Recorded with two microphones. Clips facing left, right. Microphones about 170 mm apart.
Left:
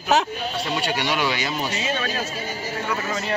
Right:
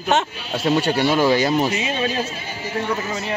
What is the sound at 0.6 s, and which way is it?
Speech, 50° right (ahead or behind).